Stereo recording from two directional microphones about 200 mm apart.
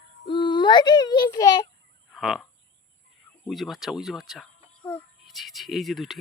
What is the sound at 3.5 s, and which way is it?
Speech, centre (ahead or behind).